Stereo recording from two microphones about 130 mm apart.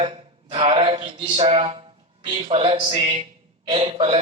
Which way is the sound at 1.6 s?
40° right (ahead or behind).